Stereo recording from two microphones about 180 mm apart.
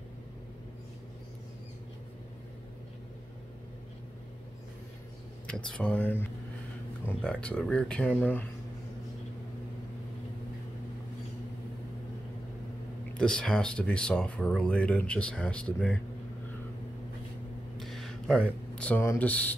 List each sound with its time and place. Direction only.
5.5 s speech: 5° left (ahead or behind)
13.2 s speech: 5° left (ahead or behind)
17.7 s a sound: centre (ahead or behind)
18.8 s speech: 10° left (ahead or behind)